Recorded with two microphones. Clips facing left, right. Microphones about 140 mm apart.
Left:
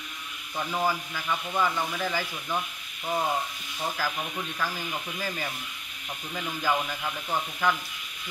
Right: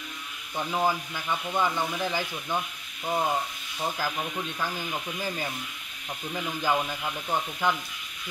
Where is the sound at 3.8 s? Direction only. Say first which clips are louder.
Right 1 dB; 20° right (ahead or behind).